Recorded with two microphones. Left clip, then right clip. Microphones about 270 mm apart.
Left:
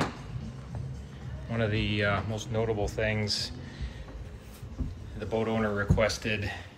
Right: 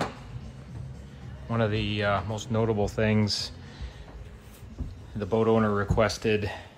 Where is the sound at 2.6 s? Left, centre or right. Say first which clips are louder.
Right 3 dB; right.